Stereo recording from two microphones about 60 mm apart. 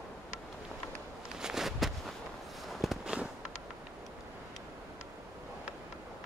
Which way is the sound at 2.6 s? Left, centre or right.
Centre.